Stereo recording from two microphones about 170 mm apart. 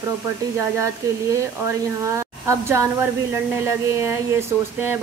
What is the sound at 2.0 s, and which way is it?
Speech, 15° right (ahead or behind).